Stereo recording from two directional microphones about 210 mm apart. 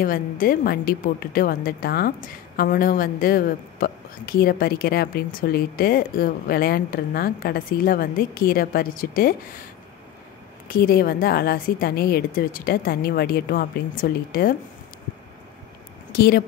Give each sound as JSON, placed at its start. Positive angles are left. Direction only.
{"t": 0.0, "sound": "a woman's voice", "side_deg": 40}
{"t": 10.7, "sound": "a woman's voice", "side_deg": 45}
{"t": 16.1, "sound": "speech", "side_deg": 45}